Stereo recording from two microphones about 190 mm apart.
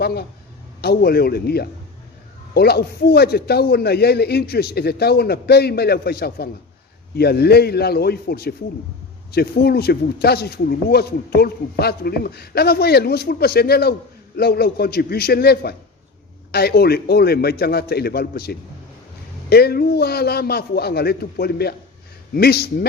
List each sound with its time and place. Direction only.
0.0 s speech: 55° left (ahead or behind)